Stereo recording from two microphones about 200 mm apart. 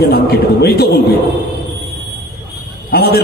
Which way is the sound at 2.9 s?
50° left (ahead or behind).